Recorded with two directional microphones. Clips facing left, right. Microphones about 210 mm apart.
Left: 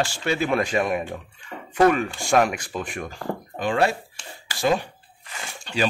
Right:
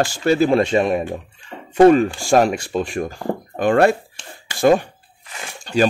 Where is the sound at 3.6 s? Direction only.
50° right (ahead or behind).